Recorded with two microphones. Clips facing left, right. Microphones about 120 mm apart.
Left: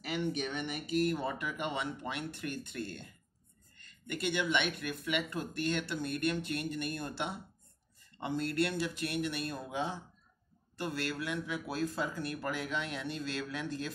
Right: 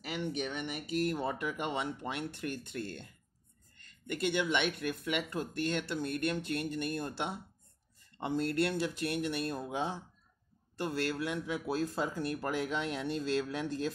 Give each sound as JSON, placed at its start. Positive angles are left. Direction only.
{"t": 0.5, "sound": "a sound", "side_deg": -10}
{"t": 0.9, "sound": "speech", "side_deg": -35}
{"t": 3.8, "sound": "speech", "side_deg": -35}